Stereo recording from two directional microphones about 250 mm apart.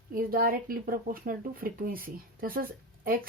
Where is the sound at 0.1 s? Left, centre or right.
Right.